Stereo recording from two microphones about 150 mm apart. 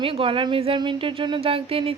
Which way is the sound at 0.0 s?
35° right (ahead or behind).